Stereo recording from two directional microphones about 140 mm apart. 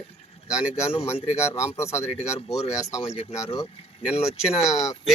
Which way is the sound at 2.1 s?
50° left (ahead or behind).